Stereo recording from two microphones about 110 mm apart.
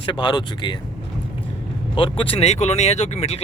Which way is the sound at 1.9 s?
50° left (ahead or behind).